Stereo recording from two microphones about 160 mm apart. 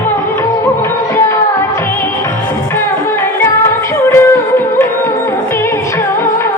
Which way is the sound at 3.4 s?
15° left (ahead or behind).